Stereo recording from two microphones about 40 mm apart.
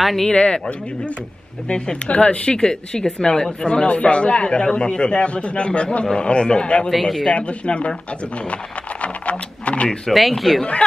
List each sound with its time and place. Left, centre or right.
0.0 s speech: centre
0.3 s speech: left
6.9 s speech: centre
7.3 s speech: left
9.0 s a sound: left
10.1 s speech: centre
10.6 s speech: left